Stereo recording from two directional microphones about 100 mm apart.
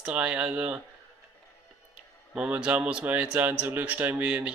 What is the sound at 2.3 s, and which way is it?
A man's voice, 10° right (ahead or behind).